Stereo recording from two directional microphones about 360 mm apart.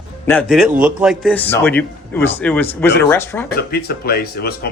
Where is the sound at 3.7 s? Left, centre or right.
Left.